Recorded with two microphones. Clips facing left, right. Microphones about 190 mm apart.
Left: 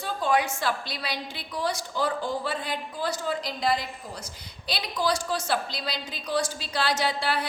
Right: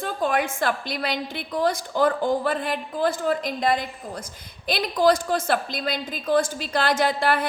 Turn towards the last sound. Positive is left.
turn(degrees=-50)  # may be behind; listen again after turning